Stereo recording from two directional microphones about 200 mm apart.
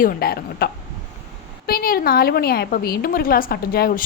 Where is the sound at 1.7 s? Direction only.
45° left (ahead or behind).